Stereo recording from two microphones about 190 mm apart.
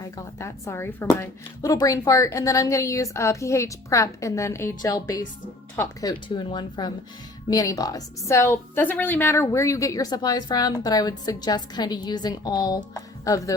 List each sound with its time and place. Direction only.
0.0 s a woman's voice: 15° left (ahead or behind)